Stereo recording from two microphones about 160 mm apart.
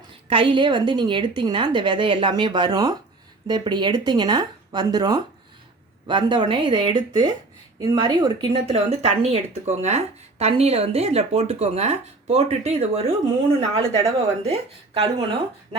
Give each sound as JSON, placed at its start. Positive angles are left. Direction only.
{"t": 0.3, "sound": "a woman's voice", "side_deg": -30}
{"t": 8.6, "sound": "speech", "side_deg": -40}